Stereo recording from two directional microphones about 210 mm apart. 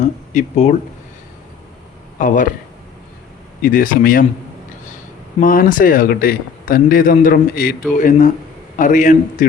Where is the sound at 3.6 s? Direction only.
40° left (ahead or behind).